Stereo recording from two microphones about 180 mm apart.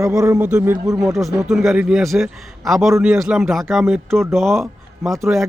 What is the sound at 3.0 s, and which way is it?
Speech, 15° right (ahead or behind).